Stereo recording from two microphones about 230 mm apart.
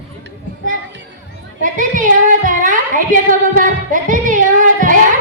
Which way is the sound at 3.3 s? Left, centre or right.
Right.